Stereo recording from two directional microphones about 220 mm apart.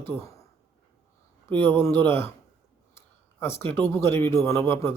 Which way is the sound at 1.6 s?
10° left (ahead or behind).